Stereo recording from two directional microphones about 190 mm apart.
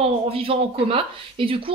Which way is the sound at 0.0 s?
30° right (ahead or behind).